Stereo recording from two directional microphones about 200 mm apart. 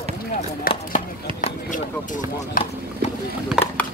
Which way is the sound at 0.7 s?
45° left (ahead or behind).